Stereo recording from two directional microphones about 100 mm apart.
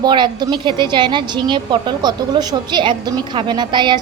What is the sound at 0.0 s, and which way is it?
A woman's voice, 50° right (ahead or behind).